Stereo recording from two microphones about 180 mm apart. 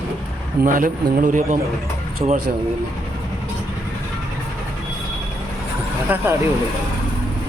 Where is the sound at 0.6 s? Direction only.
45° right (ahead or behind).